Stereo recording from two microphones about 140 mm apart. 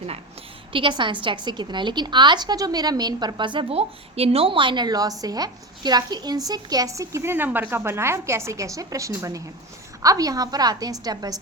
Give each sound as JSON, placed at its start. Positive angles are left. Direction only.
{"t": 0.7, "sound": "a woman's voice", "side_deg": -35}